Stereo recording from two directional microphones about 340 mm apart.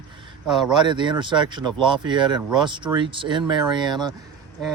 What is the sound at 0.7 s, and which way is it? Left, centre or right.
Speech, centre.